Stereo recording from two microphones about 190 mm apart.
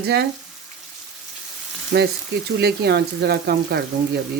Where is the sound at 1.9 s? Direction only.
50° right (ahead or behind).